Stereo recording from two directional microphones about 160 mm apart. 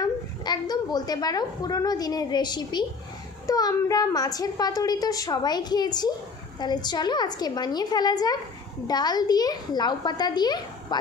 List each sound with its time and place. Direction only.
0.0 s a woman's voice: 25° left (ahead or behind)